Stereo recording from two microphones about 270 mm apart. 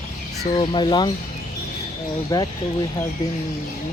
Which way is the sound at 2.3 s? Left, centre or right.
Centre.